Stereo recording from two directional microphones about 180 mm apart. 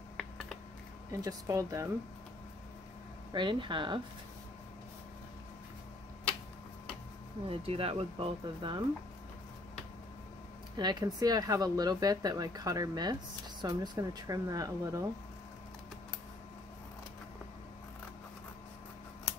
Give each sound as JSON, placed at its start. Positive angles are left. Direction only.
{"t": 1.1, "sound": "speech", "side_deg": -15}
{"t": 3.3, "sound": "speech", "side_deg": -25}
{"t": 7.4, "sound": "speech", "side_deg": -30}
{"t": 10.8, "sound": "speech", "side_deg": -20}